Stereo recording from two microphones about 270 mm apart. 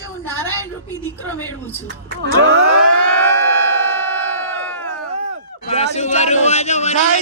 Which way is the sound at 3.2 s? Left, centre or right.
Centre.